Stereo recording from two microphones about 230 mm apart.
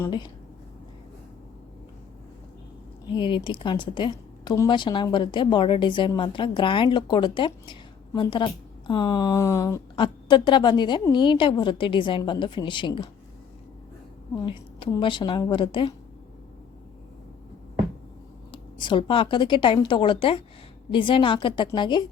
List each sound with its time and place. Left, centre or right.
0.0 s speech: centre
3.1 s a woman's voice: left
14.4 s a woman's voice: left
18.5 s a woman's voice: left